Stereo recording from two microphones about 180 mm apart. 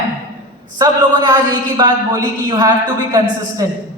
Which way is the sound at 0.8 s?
20° right (ahead or behind).